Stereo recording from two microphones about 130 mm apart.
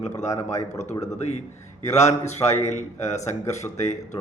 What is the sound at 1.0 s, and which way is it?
A man's voice, 60° left (ahead or behind).